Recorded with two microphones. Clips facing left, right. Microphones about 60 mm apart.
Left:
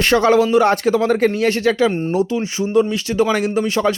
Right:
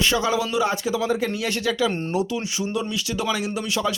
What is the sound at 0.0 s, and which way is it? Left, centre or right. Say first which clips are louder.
Speech: left 8 dB; left.